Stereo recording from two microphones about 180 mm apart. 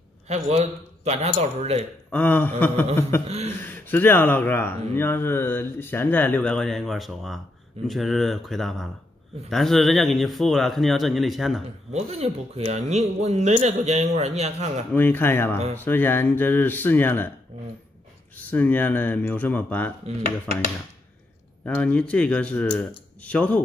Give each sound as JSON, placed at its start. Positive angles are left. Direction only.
{"t": 0.3, "sound": "speech", "side_deg": -40}
{"t": 2.0, "sound": "speech", "side_deg": 10}
{"t": 11.9, "sound": "speech", "side_deg": -35}
{"t": 15.0, "sound": "speech", "side_deg": 10}
{"t": 18.3, "sound": "speech", "side_deg": 10}
{"t": 21.6, "sound": "speech", "side_deg": 5}